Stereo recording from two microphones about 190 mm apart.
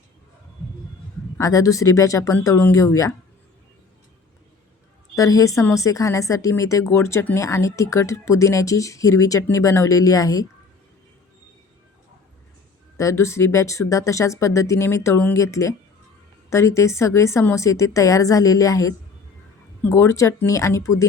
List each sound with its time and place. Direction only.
1.4 s speech: 15° left (ahead or behind)
5.1 s speech: 15° left (ahead or behind)
13.0 s speech: 15° left (ahead or behind)